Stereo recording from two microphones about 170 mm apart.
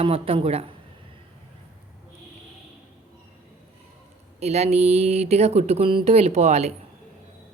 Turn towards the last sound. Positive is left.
turn(degrees=-40)  # may be behind; listen again after turning